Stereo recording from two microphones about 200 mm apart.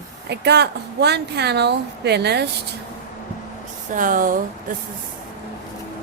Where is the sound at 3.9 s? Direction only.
40° right (ahead or behind).